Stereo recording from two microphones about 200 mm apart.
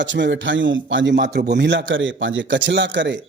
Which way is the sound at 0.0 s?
65° right (ahead or behind).